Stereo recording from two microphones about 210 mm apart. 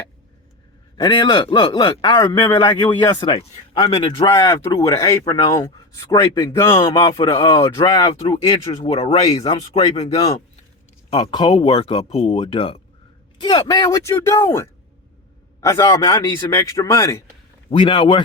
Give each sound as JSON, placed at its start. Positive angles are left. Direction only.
{"t": 0.9, "sound": "a man's voice", "side_deg": 20}
{"t": 11.1, "sound": "a man's voice", "side_deg": 20}
{"t": 17.7, "sound": "a man's voice", "side_deg": 25}